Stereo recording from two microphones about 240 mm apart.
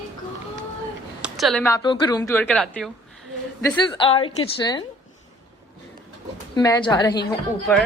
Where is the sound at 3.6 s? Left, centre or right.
Centre.